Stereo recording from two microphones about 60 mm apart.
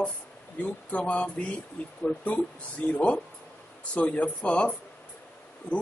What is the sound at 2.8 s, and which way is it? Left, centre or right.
Speech, left.